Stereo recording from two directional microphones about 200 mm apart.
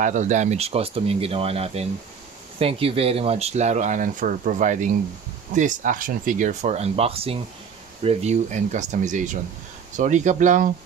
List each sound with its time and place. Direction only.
0.0 s speech: 35° right (ahead or behind)